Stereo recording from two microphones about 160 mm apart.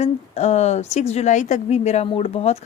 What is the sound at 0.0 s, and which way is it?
Speech, 45° left (ahead or behind).